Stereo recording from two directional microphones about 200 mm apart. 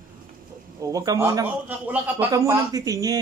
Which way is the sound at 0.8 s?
15° right (ahead or behind).